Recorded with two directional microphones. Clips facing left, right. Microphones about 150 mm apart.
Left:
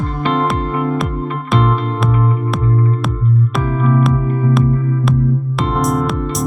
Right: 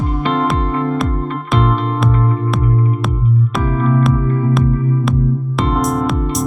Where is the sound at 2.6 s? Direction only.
20° right (ahead or behind).